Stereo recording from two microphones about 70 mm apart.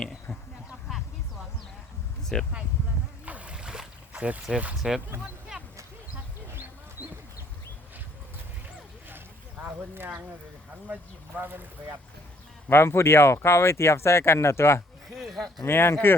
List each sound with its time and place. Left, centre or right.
2.3 s speech: centre
3.2 s boat: centre
4.8 s speech: centre
5.5 s a sound: centre
9.0 s boat: right
11.3 s speech: right
12.7 s speech: left
15.1 s a sound: centre
15.6 s speech: left